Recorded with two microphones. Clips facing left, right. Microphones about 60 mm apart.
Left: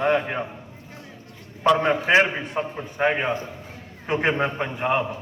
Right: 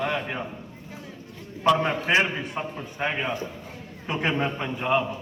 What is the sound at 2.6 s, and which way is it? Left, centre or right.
A man's voice, left.